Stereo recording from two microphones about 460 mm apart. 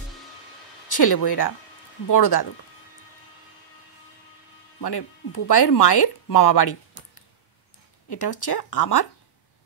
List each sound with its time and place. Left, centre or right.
0.8 s speech: left
4.7 s speech: left
5.6 s speech: left
8.1 s speech: left